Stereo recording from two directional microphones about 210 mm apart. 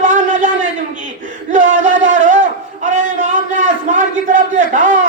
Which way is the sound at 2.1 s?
35° right (ahead or behind).